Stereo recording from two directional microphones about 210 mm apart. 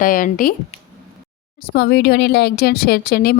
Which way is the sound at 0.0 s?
40° left (ahead or behind).